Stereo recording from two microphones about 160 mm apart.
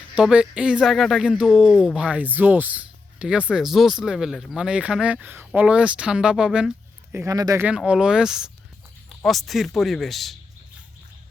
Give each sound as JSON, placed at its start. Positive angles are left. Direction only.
{"t": 0.2, "sound": "speech", "side_deg": -5}
{"t": 7.6, "sound": "speech", "side_deg": -5}